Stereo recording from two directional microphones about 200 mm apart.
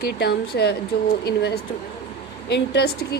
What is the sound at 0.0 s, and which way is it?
A woman's voice, 55° left (ahead or behind).